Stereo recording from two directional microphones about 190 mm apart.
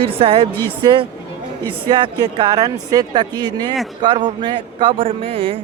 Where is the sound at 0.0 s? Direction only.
30° right (ahead or behind).